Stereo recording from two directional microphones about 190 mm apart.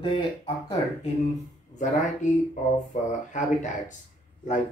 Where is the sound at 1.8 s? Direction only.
40° left (ahead or behind).